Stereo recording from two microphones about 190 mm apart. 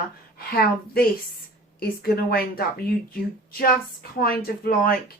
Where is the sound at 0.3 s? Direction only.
50° left (ahead or behind).